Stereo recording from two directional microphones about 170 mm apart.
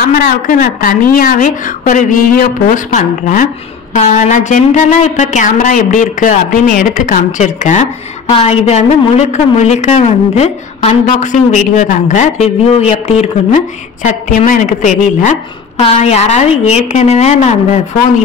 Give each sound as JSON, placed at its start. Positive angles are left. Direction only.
{"t": 0.2, "sound": "a woman's voice", "side_deg": 55}
{"t": 8.3, "sound": "a woman's voice", "side_deg": 35}
{"t": 15.8, "sound": "a woman's voice", "side_deg": 40}